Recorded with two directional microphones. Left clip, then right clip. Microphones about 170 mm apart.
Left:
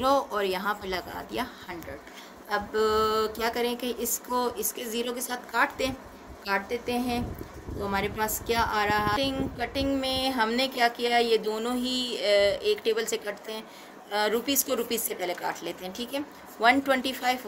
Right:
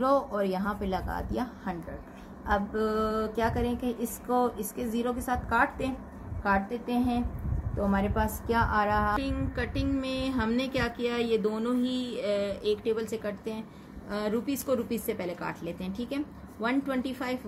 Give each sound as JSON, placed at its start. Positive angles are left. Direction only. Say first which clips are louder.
{"t": 0.0, "sound": "music", "louder": "left 2 dB", "side_deg": 30}
{"t": 2.5, "sound": "music", "louder": "left 3 dB", "side_deg": 40}
{"t": 8.5, "sound": "a sound", "louder": "left 1 dB", "side_deg": 40}